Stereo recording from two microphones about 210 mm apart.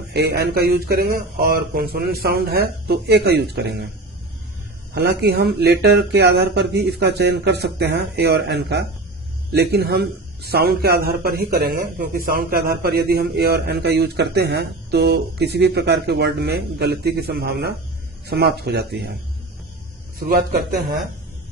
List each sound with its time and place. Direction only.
0.1 s a man's voice: 50° right (ahead or behind)
4.9 s a man's voice: 50° right (ahead or behind)
20.2 s speech: 45° right (ahead or behind)